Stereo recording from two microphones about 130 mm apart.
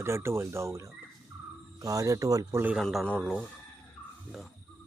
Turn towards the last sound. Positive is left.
turn(degrees=5)  # may be behind; listen again after turning